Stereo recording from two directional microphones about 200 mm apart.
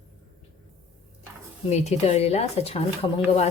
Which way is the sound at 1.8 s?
35° left (ahead or behind).